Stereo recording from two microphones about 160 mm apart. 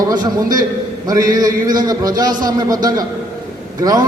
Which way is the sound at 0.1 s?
25° right (ahead or behind).